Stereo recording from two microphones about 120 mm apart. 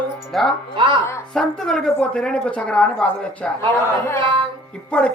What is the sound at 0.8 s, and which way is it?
Speech, 45° right (ahead or behind).